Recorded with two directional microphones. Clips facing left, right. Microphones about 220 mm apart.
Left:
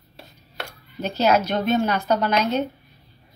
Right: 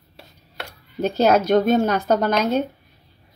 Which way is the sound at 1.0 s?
50° right (ahead or behind).